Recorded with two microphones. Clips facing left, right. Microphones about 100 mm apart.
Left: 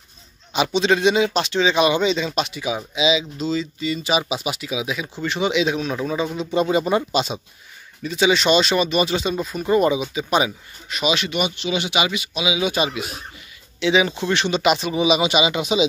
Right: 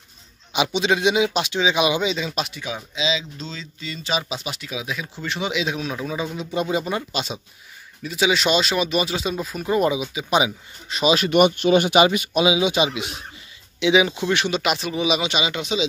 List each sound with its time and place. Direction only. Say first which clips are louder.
0.5 s speech: left 2 dB; 10° right (ahead or behind)
2.6 s speech: left 5 dB; 10° left (ahead or behind)
6.9 s speech: left 6 dB; 25° left (ahead or behind)
8.0 s speech: left 2 dB; 5° right (ahead or behind)
10.9 s speech: right 3 dB; 35° right (ahead or behind)
11.2 s speech: right 8 dB; 50° right (ahead or behind)
12.5 s a man's voice: right 1 dB; 20° right (ahead or behind); by 15.8 s 10° left (ahead or behind)